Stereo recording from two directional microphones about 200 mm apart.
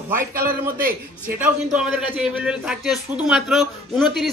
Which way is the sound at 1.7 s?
5° right (ahead or behind).